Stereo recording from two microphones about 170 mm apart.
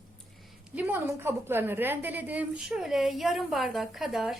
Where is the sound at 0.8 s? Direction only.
10° right (ahead or behind).